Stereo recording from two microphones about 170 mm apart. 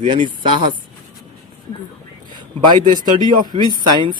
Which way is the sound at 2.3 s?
25° right (ahead or behind).